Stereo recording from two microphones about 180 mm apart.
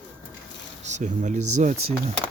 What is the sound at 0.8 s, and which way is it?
Speech, 40° right (ahead or behind).